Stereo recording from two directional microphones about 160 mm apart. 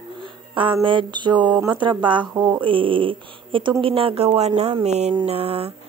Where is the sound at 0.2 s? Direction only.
30° right (ahead or behind).